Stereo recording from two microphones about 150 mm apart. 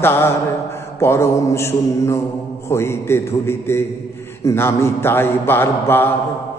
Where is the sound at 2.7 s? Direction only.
15° left (ahead or behind).